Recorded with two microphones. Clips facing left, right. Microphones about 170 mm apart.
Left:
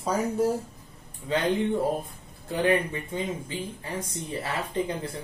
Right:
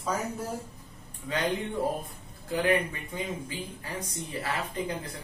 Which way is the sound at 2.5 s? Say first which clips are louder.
Left 2 dB; 25° left (ahead or behind).